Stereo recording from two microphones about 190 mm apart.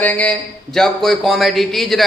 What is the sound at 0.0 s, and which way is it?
Speech, 5° left (ahead or behind).